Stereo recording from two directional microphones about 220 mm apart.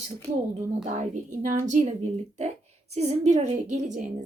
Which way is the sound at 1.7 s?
35° right (ahead or behind).